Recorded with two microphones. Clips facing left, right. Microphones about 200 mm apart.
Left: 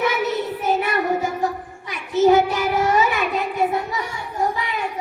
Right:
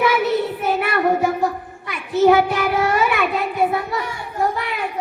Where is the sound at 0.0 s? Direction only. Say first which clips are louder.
Right 4 dB; 60° right (ahead or behind).